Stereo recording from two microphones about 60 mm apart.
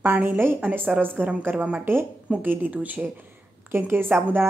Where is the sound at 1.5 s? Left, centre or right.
Right.